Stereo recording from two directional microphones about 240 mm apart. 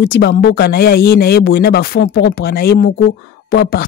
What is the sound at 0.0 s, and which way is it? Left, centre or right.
Speech, left.